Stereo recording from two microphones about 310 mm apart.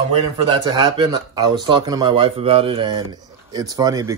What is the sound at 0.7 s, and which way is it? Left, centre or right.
Speech, centre.